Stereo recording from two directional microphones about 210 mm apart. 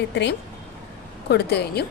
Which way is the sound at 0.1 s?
55° left (ahead or behind).